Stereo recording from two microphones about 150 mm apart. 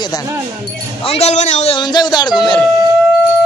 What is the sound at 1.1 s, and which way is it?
Speech, 45° left (ahead or behind).